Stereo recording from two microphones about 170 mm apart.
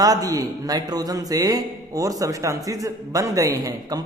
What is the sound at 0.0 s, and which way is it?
Speech, 20° right (ahead or behind).